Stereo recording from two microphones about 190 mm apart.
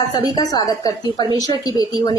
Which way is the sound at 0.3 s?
20° left (ahead or behind).